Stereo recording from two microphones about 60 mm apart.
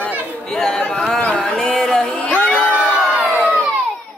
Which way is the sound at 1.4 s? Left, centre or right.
Centre.